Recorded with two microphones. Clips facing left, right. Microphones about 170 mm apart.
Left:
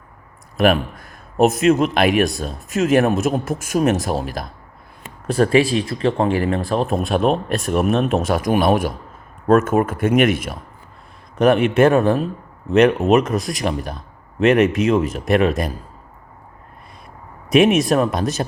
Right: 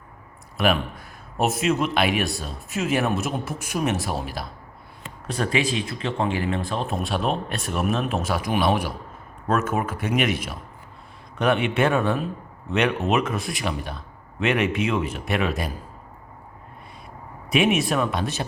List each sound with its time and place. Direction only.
0.5 s a man's voice: 45° left (ahead or behind)
17.5 s a man's voice: 40° left (ahead or behind)